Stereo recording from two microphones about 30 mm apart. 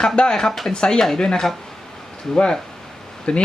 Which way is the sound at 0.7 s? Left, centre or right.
Left.